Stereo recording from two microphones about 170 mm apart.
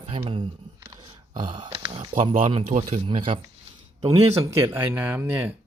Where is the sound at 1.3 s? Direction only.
25° right (ahead or behind).